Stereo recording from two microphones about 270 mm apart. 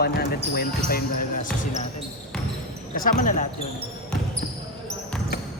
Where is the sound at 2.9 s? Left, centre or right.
Left.